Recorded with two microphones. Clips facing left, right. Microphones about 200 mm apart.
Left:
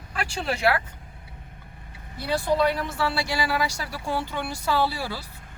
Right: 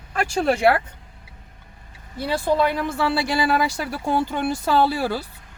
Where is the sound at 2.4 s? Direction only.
55° right (ahead or behind).